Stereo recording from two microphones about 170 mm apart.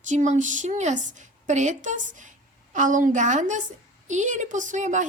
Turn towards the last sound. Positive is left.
turn(degrees=-45)  # may be behind; listen again after turning